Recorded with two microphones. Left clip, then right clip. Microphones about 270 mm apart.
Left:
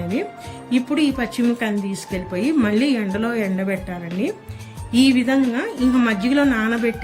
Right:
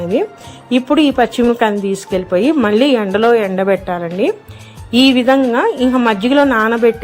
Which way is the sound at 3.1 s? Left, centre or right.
Right.